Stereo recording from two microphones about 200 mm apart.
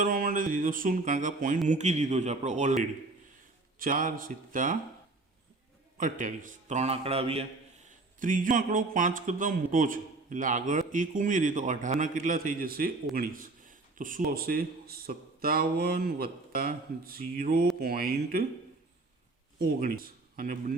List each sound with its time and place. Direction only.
0.0 s music: 45° right (ahead or behind)
1.6 s speech: 35° right (ahead or behind)
6.0 s speech: 40° right (ahead or behind)
7.9 s a man's voice: 40° right (ahead or behind)
19.5 s speech: 45° right (ahead or behind)